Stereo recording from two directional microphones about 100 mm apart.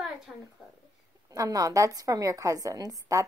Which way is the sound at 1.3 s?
35° right (ahead or behind).